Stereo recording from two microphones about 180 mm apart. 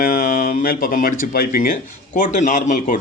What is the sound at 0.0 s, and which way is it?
Speech, 50° left (ahead or behind).